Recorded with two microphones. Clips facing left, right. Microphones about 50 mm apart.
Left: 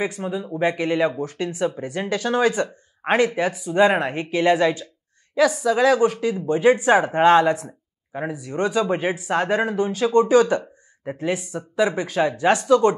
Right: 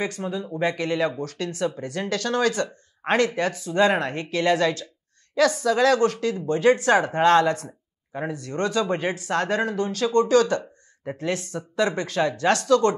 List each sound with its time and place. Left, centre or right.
0.0 s speech: centre